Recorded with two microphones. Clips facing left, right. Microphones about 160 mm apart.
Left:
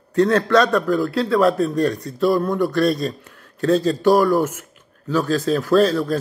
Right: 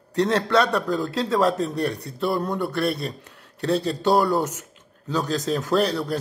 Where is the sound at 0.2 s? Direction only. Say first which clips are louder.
Left 4 dB; 20° right (ahead or behind).